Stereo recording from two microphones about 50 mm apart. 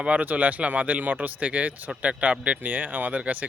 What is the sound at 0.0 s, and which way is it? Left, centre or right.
Speech, right.